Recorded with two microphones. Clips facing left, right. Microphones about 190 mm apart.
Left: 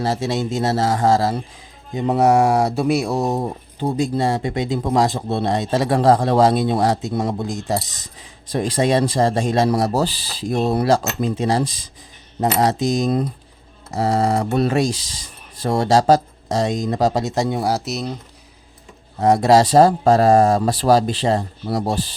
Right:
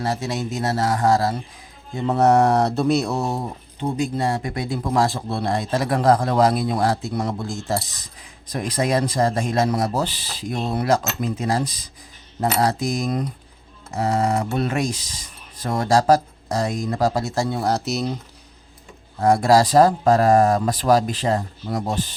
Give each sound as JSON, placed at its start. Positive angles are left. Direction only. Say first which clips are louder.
{"t": 0.0, "sound": "speech", "louder": "left 4 dB", "side_deg": 25}
{"t": 3.8, "sound": "speech", "louder": "left 3 dB", "side_deg": 35}
{"t": 19.2, "sound": "speech", "louder": "left 2 dB", "side_deg": 20}